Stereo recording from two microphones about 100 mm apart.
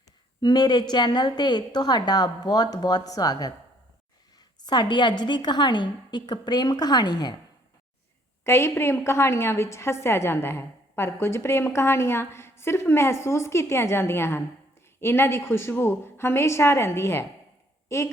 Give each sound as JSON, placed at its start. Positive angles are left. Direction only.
{"t": 0.4, "sound": "a woman's voice", "side_deg": 45}
{"t": 8.4, "sound": "a woman's voice", "side_deg": 25}